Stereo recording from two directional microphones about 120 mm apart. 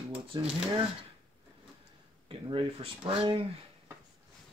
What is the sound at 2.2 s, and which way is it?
Speech, 45° right (ahead or behind).